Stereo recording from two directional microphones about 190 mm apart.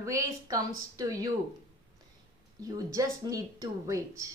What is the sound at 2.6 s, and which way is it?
Speech, 20° right (ahead or behind).